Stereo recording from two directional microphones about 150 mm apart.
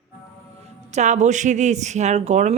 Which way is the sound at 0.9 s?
50° right (ahead or behind).